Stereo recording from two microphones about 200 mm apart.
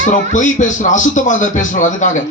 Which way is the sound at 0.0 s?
40° left (ahead or behind).